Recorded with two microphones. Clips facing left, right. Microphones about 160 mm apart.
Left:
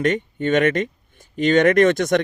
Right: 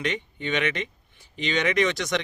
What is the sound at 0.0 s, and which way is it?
Speech, 50° left (ahead or behind).